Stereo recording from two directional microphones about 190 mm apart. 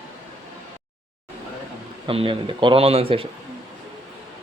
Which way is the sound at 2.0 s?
30° right (ahead or behind).